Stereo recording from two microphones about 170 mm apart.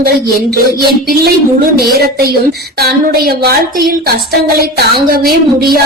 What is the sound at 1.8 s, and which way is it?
A woman's voice, 65° right (ahead or behind).